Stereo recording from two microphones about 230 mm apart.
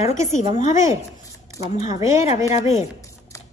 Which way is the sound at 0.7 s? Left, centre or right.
Centre.